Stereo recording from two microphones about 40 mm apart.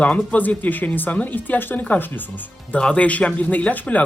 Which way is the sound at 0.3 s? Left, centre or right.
Left.